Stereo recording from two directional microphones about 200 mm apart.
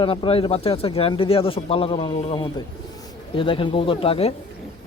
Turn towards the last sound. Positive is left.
turn(degrees=30)  # may be behind; listen again after turning